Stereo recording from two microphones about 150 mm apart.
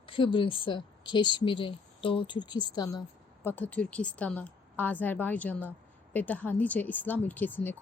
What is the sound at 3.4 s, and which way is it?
A woman's voice, 10° left (ahead or behind).